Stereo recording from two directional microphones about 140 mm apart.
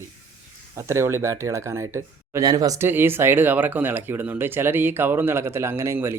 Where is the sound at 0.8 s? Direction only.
20° right (ahead or behind).